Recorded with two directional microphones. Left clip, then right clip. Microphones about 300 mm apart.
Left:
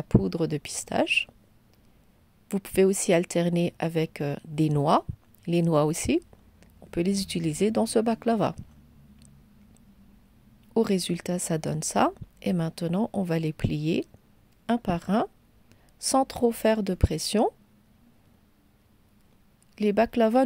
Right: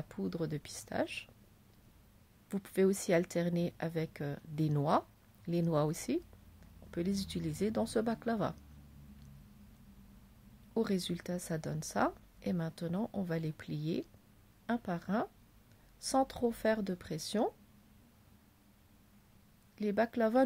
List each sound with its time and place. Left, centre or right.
0.1 s speech: left
2.4 s speech: left
10.7 s speech: left
19.7 s speech: left